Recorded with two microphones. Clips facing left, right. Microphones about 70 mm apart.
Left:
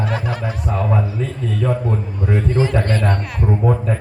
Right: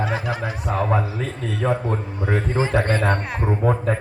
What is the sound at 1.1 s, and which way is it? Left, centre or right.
Speech, right.